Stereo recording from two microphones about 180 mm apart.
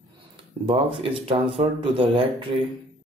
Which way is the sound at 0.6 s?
30° right (ahead or behind).